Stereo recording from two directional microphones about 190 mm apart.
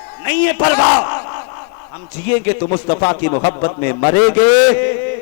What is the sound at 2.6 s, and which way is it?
A man's voice, 30° left (ahead or behind).